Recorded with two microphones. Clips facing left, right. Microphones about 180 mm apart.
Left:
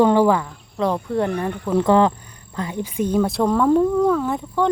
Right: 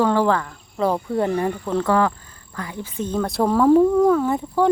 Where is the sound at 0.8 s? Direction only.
5° right (ahead or behind).